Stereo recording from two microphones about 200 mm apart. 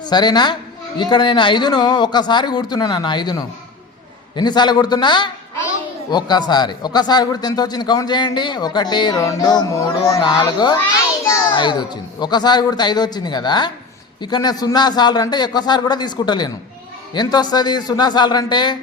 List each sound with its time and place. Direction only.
0.0 s a woman's voice: 20° left (ahead or behind)